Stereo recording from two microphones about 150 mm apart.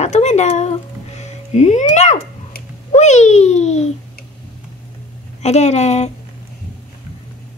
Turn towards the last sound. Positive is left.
turn(degrees=50)  # may be behind; listen again after turning